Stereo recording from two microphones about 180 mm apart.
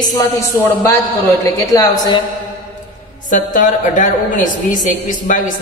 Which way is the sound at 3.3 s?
45° left (ahead or behind).